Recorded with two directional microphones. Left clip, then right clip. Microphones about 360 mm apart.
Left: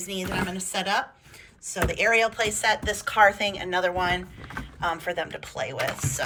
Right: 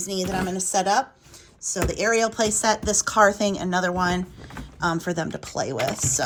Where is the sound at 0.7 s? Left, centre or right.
Centre.